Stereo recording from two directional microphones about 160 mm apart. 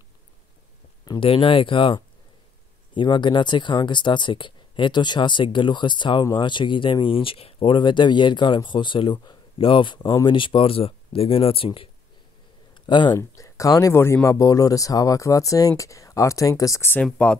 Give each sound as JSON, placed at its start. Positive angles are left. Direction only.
{"t": 1.0, "sound": "speech", "side_deg": 30}